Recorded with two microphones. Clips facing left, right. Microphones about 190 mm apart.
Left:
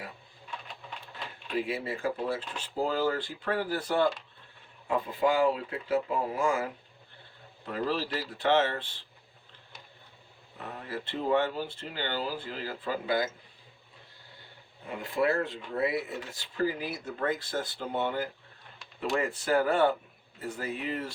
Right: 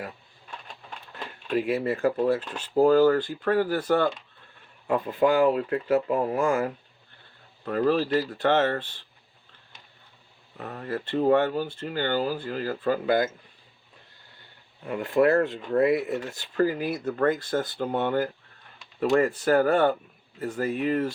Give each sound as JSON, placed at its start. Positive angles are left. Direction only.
{"t": 1.5, "sound": "speech", "side_deg": -50}
{"t": 1.7, "sound": "speech", "side_deg": -65}
{"t": 2.1, "sound": "speech", "side_deg": -50}
{"t": 2.7, "sound": "speech", "side_deg": -60}
{"t": 7.7, "sound": "speech", "side_deg": -50}
{"t": 10.8, "sound": "speech", "side_deg": -55}
{"t": 14.8, "sound": "speech", "side_deg": -65}